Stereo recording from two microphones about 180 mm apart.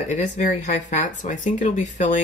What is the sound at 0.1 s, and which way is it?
Speech, 45° left (ahead or behind).